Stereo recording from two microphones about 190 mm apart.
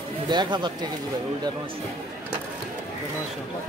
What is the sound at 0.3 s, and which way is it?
Speech, 25° right (ahead or behind).